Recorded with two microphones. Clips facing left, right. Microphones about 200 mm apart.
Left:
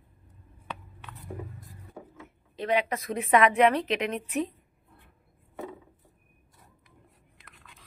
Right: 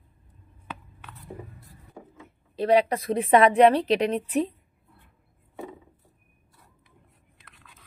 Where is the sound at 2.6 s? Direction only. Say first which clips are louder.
Right 6 dB; 35° right (ahead or behind).